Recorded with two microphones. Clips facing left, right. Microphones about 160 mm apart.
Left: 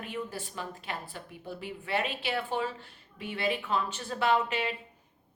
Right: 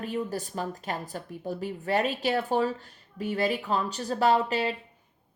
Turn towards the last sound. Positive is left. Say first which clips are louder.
# right 4 dB
turn(degrees=-35)  # may be behind; listen again after turning